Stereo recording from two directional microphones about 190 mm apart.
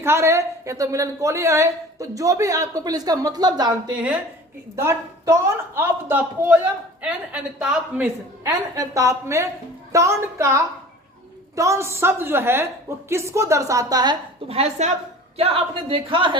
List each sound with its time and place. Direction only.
0.0 s a woman's voice: 15° right (ahead or behind)
4.8 s a woman's voice: 15° right (ahead or behind)
7.6 s a woman's voice: 5° right (ahead or behind)
8.4 s a woman's voice: 20° right (ahead or behind)